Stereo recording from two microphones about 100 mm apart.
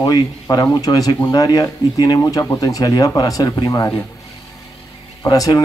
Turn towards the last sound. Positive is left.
turn(degrees=35)  # may be behind; listen again after turning